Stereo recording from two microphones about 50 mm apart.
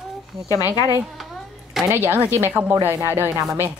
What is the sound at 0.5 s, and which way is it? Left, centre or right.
Speech, right.